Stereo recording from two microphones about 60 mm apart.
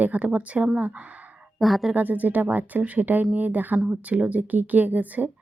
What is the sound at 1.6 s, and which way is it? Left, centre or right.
Speech, centre.